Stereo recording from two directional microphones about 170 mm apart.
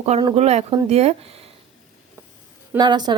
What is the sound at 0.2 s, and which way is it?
Dishes, 25° right (ahead or behind).